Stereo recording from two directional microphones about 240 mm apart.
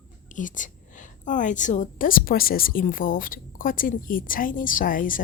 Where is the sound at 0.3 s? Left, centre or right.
Left.